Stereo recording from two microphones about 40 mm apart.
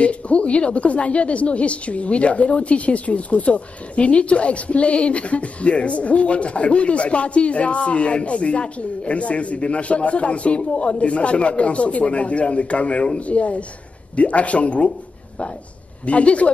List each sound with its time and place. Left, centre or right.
0.0 s a woman's voice: left
16.1 s a woman's voice: left